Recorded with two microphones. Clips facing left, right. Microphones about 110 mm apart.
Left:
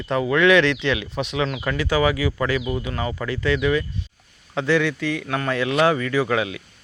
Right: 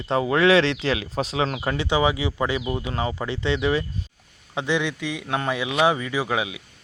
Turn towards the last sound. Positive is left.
turn(degrees=-10)  # may be behind; listen again after turning